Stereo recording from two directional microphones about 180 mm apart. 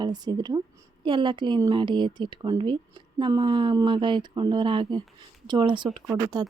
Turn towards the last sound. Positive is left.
turn(degrees=-20)  # may be behind; listen again after turning